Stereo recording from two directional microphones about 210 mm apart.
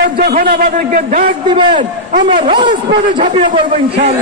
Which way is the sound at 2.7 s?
40° right (ahead or behind).